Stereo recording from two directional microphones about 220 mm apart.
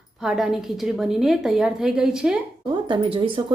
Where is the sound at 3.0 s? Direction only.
25° right (ahead or behind).